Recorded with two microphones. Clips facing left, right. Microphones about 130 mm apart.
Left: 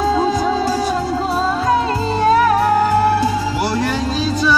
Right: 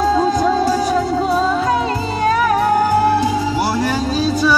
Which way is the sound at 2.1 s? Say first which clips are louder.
Left 3 dB; 35° left (ahead or behind).